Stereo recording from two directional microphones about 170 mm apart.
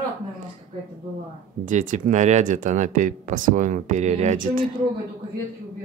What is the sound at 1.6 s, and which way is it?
Speech, 50° right (ahead or behind).